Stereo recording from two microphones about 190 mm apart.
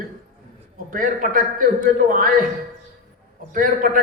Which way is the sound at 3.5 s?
45° right (ahead or behind).